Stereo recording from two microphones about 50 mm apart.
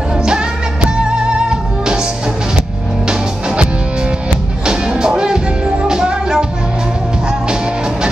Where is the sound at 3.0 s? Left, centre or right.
Centre.